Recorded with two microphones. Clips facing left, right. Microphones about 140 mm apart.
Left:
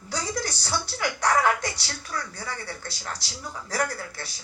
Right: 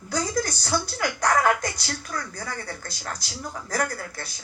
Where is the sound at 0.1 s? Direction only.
45° right (ahead or behind).